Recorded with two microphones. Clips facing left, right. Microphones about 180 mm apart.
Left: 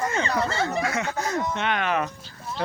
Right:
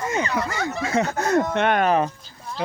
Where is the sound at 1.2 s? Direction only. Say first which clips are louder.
Right 7 dB; 60° right (ahead or behind).